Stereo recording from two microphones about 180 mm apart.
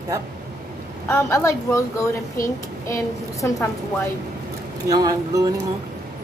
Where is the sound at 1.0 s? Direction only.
15° left (ahead or behind).